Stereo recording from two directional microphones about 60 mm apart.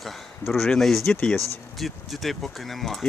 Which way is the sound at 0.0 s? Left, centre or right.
Centre.